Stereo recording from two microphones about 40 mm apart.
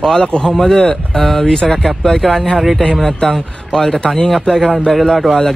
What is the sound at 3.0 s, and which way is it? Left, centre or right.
Speech, centre.